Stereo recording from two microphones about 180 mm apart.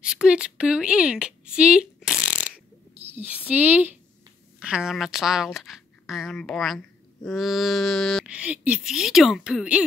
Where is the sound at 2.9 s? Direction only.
35° right (ahead or behind).